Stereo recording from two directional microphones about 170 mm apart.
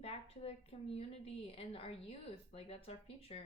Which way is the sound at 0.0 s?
35° left (ahead or behind).